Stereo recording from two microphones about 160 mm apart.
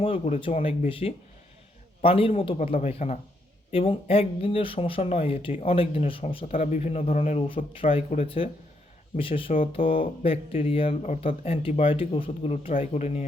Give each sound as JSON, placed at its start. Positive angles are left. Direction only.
{"t": 0.0, "sound": "speech", "side_deg": 35}
{"t": 6.5, "sound": "speech", "side_deg": 50}